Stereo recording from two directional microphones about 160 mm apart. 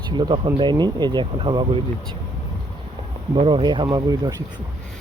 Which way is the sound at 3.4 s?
35° right (ahead or behind).